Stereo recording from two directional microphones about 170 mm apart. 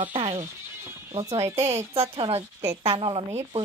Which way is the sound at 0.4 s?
15° right (ahead or behind).